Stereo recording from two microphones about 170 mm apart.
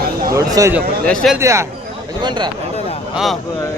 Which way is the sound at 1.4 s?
15° right (ahead or behind).